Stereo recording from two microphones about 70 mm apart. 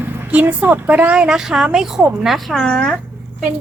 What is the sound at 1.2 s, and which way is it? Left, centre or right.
Speech, centre.